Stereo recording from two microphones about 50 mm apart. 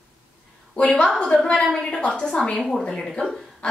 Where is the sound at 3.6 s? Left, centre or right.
Centre.